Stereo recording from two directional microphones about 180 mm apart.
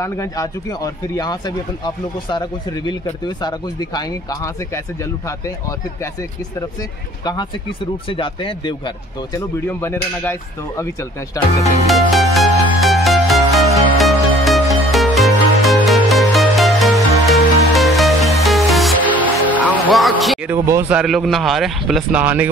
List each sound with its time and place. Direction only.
0.0 s speech: 15° left (ahead or behind)
2.9 s speech: 25° left (ahead or behind)
7.2 s speech: 25° left (ahead or behind)
11.4 s speech: 20° left (ahead or behind)
11.9 s music: centre (ahead or behind)
20.5 s speech: 15° right (ahead or behind)
21.0 s a man's voice: centre (ahead or behind)